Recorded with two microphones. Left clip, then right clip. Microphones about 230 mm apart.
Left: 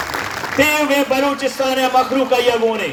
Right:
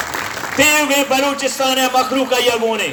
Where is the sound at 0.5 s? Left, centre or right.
Right.